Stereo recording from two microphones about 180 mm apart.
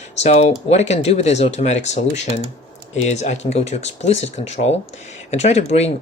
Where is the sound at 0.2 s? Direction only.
40° left (ahead or behind).